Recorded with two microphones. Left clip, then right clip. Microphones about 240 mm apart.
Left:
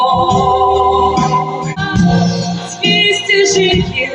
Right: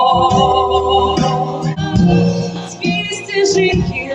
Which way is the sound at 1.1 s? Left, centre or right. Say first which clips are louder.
Left 3 dB; right.